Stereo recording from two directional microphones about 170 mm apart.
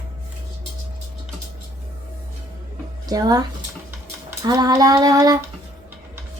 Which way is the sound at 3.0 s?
20° right (ahead or behind).